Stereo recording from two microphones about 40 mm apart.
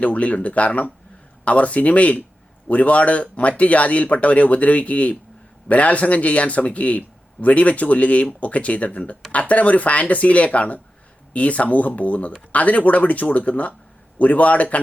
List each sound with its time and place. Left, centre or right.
0.0 s speech: left